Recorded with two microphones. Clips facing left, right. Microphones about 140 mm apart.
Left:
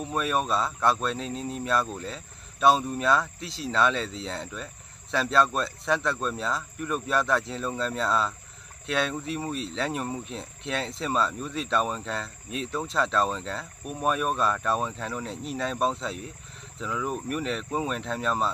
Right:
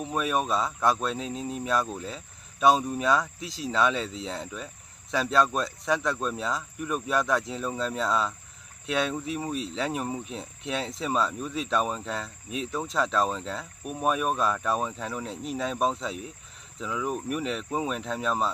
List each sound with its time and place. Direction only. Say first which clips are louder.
0.0 s speech: even; 5° right (ahead or behind)
3.4 s speech: even; 30° left (ahead or behind)
3.7 s speech: left 1 dB; 10° right (ahead or behind)